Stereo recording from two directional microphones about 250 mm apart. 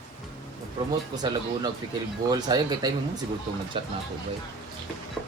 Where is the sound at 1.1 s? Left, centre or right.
Centre.